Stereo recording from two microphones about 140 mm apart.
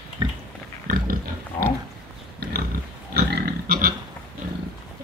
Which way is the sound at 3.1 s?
90° right.